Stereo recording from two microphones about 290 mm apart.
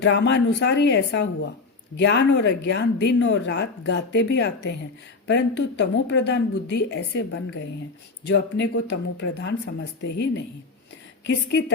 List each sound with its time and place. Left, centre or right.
0.0 s speech: left